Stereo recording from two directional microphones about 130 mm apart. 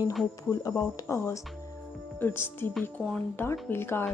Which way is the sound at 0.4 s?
25° left (ahead or behind).